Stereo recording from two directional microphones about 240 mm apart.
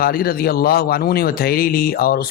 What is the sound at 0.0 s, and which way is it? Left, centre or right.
Speech, left.